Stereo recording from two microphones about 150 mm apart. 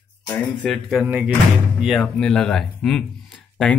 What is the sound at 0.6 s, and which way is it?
Speech, 5° right (ahead or behind).